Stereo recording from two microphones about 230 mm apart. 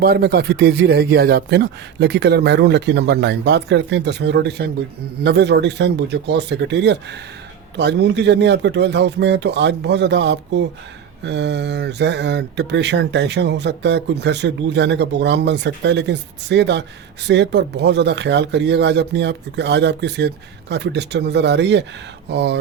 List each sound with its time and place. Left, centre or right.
0.0 s speech: right